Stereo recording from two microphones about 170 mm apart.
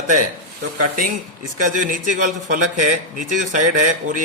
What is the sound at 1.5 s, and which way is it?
Speech, 50° right (ahead or behind).